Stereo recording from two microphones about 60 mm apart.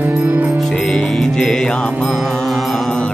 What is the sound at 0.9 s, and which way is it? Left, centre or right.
Music, centre.